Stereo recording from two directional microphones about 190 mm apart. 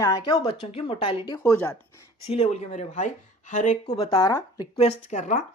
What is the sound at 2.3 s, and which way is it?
Speech, 35° left (ahead or behind).